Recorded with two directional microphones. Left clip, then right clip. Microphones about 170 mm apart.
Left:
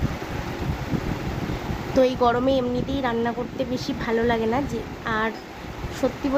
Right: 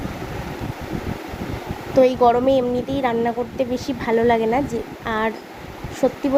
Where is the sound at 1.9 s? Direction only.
15° right (ahead or behind).